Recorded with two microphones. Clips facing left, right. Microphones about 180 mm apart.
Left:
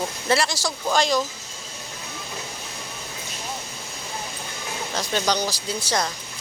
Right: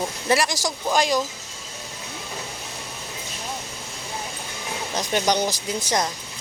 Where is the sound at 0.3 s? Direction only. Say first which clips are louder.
Right 1 dB; 15° right (ahead or behind).